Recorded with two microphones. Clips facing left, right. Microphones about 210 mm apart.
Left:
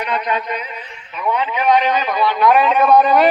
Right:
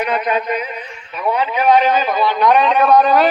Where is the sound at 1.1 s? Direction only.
35° right (ahead or behind).